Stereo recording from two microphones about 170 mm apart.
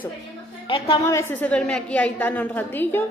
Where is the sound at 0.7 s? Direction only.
35° left (ahead or behind).